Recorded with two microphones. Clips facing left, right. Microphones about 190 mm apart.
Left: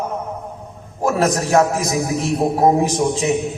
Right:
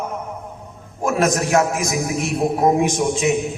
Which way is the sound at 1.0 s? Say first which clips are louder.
Left 1 dB; 35° left (ahead or behind).